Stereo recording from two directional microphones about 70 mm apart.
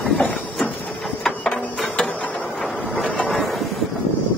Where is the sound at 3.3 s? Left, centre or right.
Centre.